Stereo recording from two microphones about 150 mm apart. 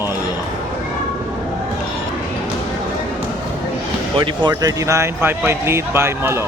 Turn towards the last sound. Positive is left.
turn(degrees=-15)  # may be behind; listen again after turning